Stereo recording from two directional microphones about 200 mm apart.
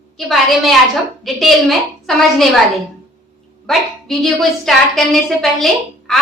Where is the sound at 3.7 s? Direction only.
Centre (ahead or behind).